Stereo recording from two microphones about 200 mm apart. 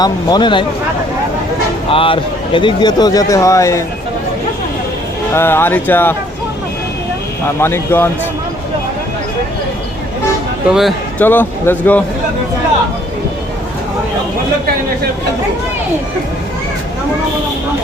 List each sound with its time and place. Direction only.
0.0 s speech: 20° left (ahead or behind)
1.9 s speech: 25° left (ahead or behind)
5.3 s speech: 10° left (ahead or behind)
7.6 s speech: 10° left (ahead or behind)
10.7 s a man's voice: centre (ahead or behind)
11.2 s speech: 10° left (ahead or behind)